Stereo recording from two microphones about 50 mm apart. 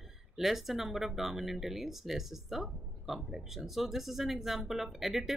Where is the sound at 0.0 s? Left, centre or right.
Centre.